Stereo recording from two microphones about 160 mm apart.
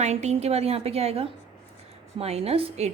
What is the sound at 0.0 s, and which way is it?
A woman's voice, 45° right (ahead or behind).